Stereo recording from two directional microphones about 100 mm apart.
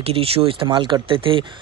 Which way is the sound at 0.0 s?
75° right (ahead or behind).